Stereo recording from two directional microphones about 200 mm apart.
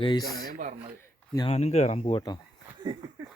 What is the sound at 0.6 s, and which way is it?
Speech, 35° right (ahead or behind).